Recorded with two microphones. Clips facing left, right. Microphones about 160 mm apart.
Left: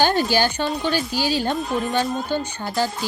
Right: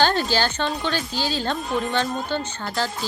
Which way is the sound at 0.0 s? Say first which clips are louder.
Left 2 dB; 10° left (ahead or behind).